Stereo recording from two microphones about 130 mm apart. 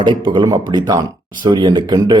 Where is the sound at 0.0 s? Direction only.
35° right (ahead or behind).